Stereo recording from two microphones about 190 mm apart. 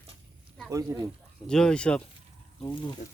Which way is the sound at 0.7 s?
15° right (ahead or behind).